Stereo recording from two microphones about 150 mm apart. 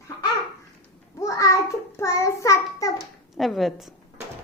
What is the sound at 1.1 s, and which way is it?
Child singing, 20° left (ahead or behind).